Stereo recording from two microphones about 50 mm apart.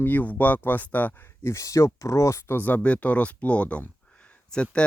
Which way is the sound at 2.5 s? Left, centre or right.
Left.